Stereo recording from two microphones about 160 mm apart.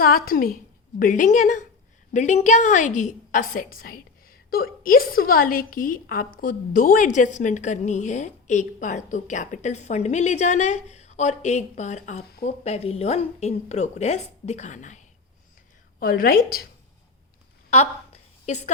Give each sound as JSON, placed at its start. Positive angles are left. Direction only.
{"t": 0.0, "sound": "a woman's voice", "side_deg": 65}
{"t": 16.0, "sound": "a woman's voice", "side_deg": 65}
{"t": 17.7, "sound": "a sound", "side_deg": 45}